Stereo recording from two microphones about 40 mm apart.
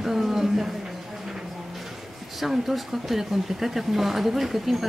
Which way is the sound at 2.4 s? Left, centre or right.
Centre.